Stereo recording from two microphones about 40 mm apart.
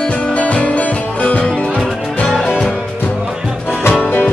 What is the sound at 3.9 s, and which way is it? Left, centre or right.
Music, left.